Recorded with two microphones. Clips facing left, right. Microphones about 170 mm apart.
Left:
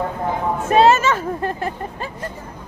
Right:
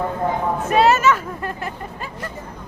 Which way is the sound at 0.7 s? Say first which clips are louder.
Left 2 dB; 25° left (ahead or behind).